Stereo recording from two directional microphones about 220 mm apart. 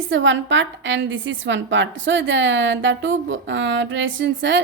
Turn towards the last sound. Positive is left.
turn(degrees=-55)  # may be behind; listen again after turning